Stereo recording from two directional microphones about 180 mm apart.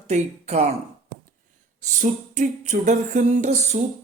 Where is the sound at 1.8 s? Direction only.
40° right (ahead or behind).